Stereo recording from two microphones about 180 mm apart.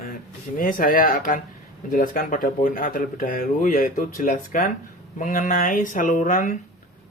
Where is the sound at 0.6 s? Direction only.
50° left (ahead or behind).